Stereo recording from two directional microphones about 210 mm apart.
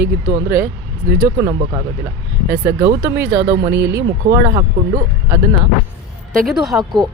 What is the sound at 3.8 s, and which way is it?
Speech, 50° right (ahead or behind).